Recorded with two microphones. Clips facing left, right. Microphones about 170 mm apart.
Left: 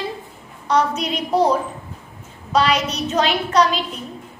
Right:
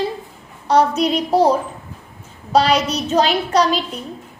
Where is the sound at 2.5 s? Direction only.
35° right (ahead or behind).